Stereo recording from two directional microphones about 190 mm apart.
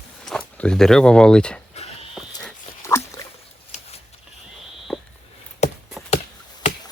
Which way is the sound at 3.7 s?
35° left (ahead or behind).